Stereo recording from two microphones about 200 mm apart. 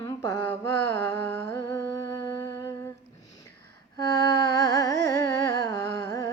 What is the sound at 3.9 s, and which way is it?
Carnatic music, 20° left (ahead or behind).